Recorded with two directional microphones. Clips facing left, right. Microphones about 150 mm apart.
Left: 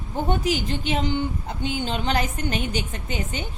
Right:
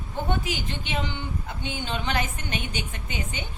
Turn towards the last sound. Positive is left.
turn(degrees=40)  # may be behind; listen again after turning